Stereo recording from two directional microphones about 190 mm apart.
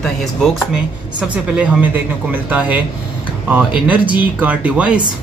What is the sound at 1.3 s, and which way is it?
Speech, 10° right (ahead or behind).